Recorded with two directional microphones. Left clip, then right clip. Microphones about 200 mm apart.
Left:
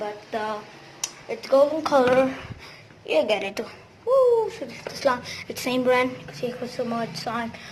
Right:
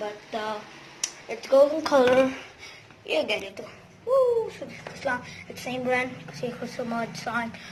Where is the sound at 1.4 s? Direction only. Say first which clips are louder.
Even; 15° right (ahead or behind).